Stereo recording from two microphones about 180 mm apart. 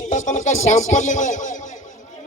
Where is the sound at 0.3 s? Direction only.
40° left (ahead or behind).